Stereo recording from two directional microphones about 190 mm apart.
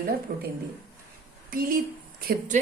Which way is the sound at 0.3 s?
50° right (ahead or behind).